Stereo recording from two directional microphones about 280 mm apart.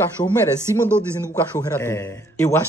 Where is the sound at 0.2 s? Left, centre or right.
Centre.